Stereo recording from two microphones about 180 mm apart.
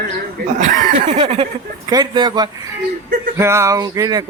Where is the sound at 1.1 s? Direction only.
30° right (ahead or behind).